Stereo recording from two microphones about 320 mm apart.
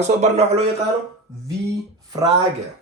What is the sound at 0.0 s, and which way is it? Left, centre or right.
Speech, centre.